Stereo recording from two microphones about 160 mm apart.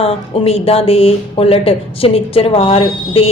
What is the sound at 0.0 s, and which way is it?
Speech, 35° left (ahead or behind).